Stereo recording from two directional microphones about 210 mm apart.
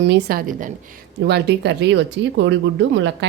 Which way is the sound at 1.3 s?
55° right (ahead or behind).